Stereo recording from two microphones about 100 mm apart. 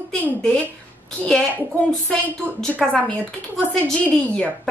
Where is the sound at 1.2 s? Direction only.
15° left (ahead or behind).